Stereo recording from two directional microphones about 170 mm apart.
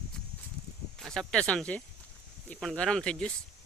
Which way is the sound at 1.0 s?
5° left (ahead or behind).